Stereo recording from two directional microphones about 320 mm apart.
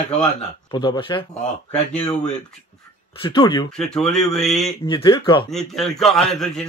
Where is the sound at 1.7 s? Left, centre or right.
Centre.